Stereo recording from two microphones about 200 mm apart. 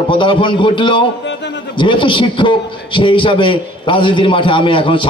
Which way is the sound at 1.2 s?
60° left (ahead or behind).